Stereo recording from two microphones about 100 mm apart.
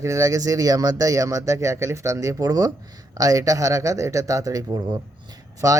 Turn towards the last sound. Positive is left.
turn(degrees=-35)  # may be behind; listen again after turning